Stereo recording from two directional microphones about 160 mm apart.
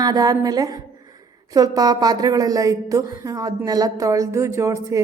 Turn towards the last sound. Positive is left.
turn(degrees=-20)  # may be behind; listen again after turning